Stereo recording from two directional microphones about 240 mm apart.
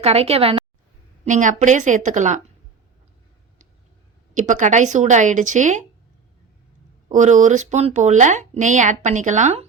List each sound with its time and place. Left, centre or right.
0.0 s a woman's voice: right
4.4 s speech: right
7.1 s speech: right